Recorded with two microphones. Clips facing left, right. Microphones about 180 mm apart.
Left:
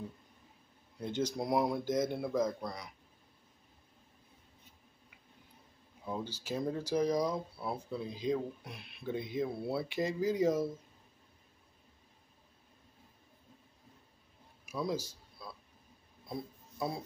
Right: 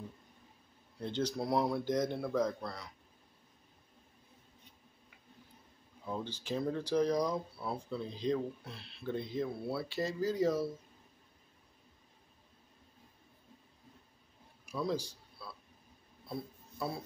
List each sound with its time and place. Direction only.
0.9 s speech: 10° left (ahead or behind)
6.4 s speech: 10° left (ahead or behind)
14.7 s a man's voice: 10° left (ahead or behind)
15.4 s a sound: 15° left (ahead or behind)